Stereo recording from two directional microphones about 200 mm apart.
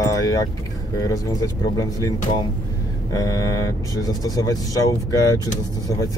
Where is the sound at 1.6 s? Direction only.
20° left (ahead or behind).